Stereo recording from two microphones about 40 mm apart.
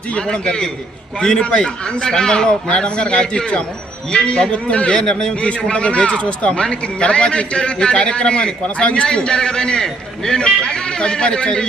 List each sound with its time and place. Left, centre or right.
0.1 s speech: left
4.5 s a man's voice: left
4.9 s speech: centre